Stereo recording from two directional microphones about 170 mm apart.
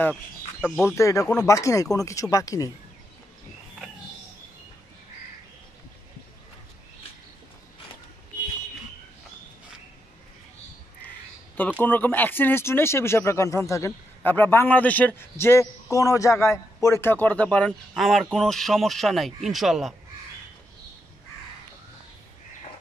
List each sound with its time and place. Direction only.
0.6 s speech: 5° right (ahead or behind)
0.8 s speech: 15° left (ahead or behind)
11.8 s speech: 10° left (ahead or behind)